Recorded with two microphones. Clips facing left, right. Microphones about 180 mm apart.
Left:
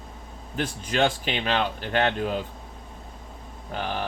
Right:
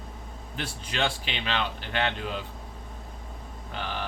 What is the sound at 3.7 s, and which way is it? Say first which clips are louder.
Speech: left 5 dB; 45° left (ahead or behind).